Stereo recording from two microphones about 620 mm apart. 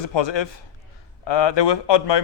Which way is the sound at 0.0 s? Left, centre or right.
Left.